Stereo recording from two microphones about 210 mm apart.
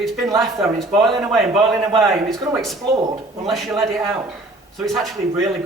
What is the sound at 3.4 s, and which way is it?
A man's voice, centre (ahead or behind).